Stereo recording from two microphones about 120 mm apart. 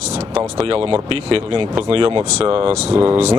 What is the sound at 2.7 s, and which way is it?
Speech, 10° right (ahead or behind).